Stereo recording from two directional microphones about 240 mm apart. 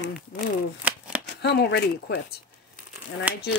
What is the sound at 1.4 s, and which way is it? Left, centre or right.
Speech, left.